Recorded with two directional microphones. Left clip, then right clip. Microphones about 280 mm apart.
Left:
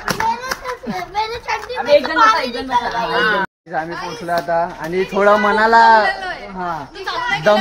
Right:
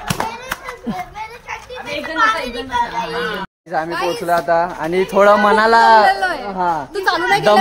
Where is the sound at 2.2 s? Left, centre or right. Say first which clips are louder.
Left 3 dB; centre.